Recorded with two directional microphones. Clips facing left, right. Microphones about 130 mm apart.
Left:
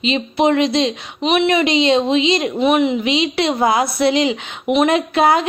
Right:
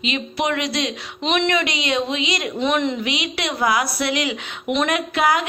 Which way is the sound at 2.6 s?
10° left (ahead or behind).